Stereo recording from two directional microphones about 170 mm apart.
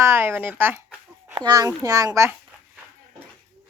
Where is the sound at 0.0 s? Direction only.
15° right (ahead or behind).